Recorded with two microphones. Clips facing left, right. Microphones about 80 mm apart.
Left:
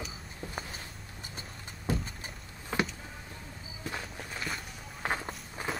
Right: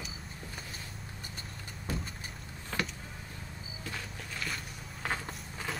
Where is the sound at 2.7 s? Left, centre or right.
Left.